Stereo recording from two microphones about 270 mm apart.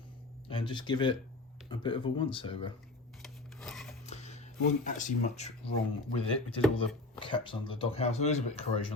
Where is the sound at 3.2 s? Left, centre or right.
Centre.